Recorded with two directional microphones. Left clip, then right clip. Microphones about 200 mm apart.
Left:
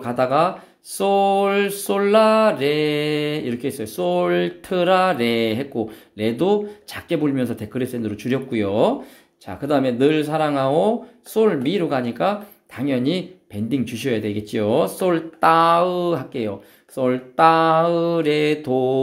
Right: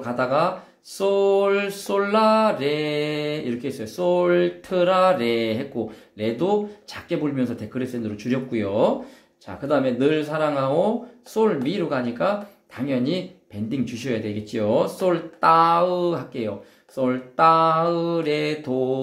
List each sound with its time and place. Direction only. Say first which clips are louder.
0.0 s mantra: left 3 dB; 45° left (ahead or behind)